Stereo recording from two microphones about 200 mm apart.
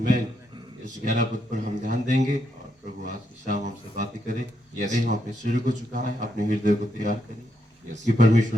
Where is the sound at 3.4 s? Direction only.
40° right (ahead or behind).